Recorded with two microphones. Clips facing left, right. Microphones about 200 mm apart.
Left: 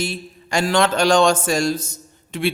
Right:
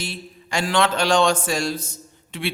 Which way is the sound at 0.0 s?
45° left (ahead or behind).